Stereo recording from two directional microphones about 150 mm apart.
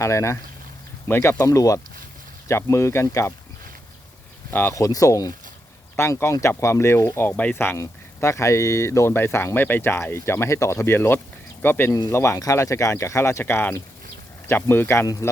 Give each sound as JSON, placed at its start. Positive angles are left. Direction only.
{"t": 0.0, "sound": "speech", "side_deg": 20}
{"t": 4.5, "sound": "speech", "side_deg": 20}